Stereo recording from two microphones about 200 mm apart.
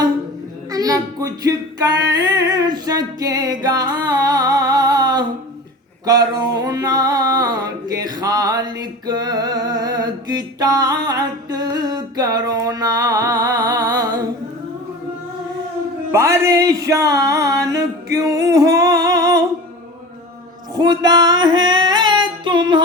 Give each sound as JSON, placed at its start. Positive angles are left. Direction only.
{"t": 0.7, "sound": "music", "side_deg": -20}
{"t": 6.1, "sound": "a sound", "side_deg": -20}
{"t": 16.1, "sound": "music", "side_deg": -15}
{"t": 20.7, "sound": "singing", "side_deg": -20}